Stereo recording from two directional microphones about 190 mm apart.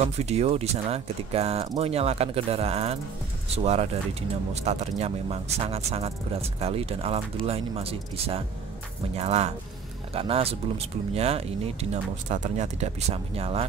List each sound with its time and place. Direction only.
0.2 s speech: 35° right (ahead or behind)